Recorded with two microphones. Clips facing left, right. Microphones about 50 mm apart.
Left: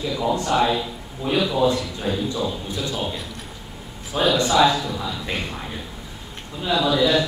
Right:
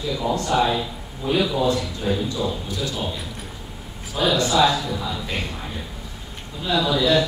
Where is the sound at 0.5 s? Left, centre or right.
Centre.